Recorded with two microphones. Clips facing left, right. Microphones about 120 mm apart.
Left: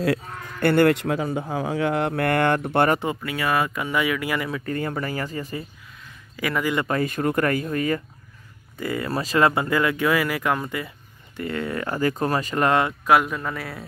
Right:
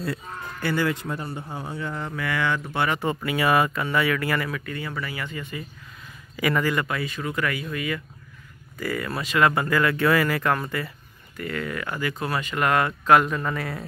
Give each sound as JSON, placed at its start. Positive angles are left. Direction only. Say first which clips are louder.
{"t": 0.0, "sound": "speech", "louder": "left 7 dB", "side_deg": 75}
{"t": 3.2, "sound": "speech", "louder": "right 2 dB", "side_deg": -5}
{"t": 3.7, "sound": "speech", "louder": "even", "side_deg": 15}
{"t": 4.6, "sound": "speech", "louder": "left 5 dB", "side_deg": 40}
{"t": 6.3, "sound": "a man's voice", "louder": "right 2 dB", "side_deg": 0}
{"t": 6.6, "sound": "speech", "louder": "left 1 dB", "side_deg": 20}
{"t": 6.9, "sound": "speech", "louder": "left 6 dB", "side_deg": 45}
{"t": 8.7, "sound": "speech", "louder": "left 2 dB", "side_deg": 25}
{"t": 9.6, "sound": "speech", "louder": "even", "side_deg": 20}
{"t": 11.3, "sound": "speech", "louder": "left 3 dB", "side_deg": 25}
{"t": 13.0, "sound": "speech", "louder": "right 1 dB", "side_deg": 5}